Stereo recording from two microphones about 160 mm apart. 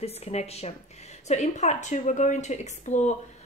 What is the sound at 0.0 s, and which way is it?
A woman's voice, 40° left (ahead or behind).